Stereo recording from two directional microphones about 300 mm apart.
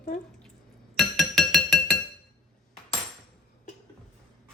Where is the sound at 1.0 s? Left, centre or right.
Centre.